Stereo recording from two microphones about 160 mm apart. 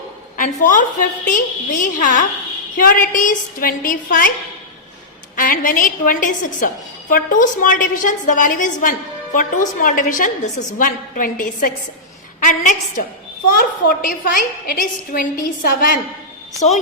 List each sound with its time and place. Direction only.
0.3 s a woman's voice: 55° left (ahead or behind)
5.4 s a woman's voice: 60° left (ahead or behind)
13.5 s a woman's voice: 65° left (ahead or behind)
16.6 s a woman's voice: 45° left (ahead or behind)